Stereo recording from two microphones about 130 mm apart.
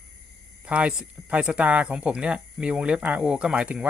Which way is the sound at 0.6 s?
10° right (ahead or behind).